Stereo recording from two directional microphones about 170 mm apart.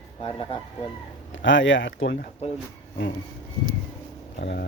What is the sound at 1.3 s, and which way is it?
Speech, 90° left.